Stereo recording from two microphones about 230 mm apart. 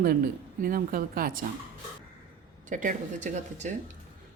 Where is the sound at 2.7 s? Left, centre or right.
Right.